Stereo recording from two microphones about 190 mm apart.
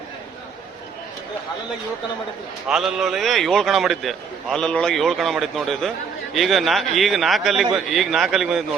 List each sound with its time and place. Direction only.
2.6 s a man's voice: centre (ahead or behind)